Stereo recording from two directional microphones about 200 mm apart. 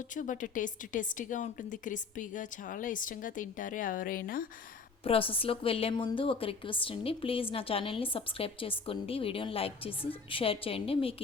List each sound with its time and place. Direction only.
0.1 s a woman's voice: 40° left (ahead or behind)
5.0 s a woman's voice: 25° left (ahead or behind)